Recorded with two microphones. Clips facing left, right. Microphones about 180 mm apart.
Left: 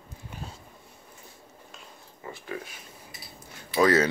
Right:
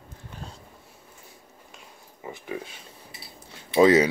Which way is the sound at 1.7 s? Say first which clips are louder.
Even; 15° right (ahead or behind).